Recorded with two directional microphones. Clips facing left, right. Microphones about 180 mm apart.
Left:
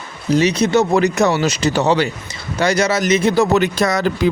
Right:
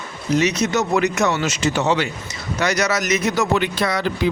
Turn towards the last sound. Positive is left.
turn(degrees=45)  # may be behind; listen again after turning